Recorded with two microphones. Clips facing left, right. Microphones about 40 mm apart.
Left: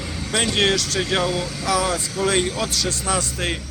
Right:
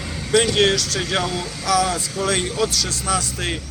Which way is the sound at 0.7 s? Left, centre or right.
Left.